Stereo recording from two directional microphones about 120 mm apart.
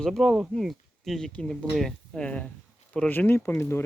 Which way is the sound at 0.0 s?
Centre (ahead or behind).